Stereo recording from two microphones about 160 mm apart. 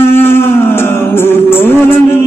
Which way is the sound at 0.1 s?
15° left (ahead or behind).